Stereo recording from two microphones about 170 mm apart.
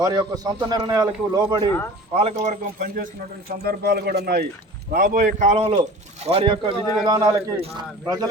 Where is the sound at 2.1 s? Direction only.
40° right (ahead or behind).